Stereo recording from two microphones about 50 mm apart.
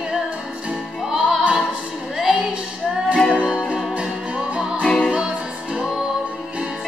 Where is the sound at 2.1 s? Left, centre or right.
Centre.